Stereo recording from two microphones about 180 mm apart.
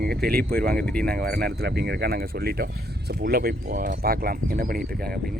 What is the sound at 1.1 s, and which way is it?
Speech, 60° right (ahead or behind).